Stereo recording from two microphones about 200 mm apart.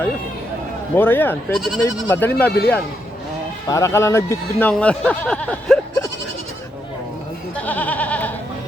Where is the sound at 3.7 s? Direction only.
15° left (ahead or behind).